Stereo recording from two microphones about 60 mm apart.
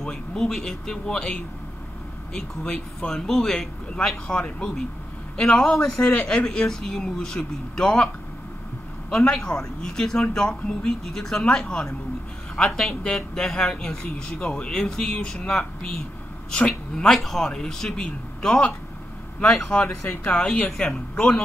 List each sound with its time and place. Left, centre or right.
0.0 s a man's voice: centre
9.1 s a man's voice: centre